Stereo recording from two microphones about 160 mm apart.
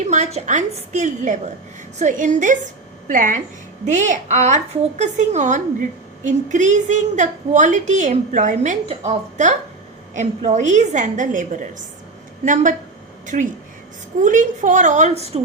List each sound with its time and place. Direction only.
0.0 s a woman's voice: 45° right (ahead or behind)
13.2 s a woman's voice: 50° right (ahead or behind)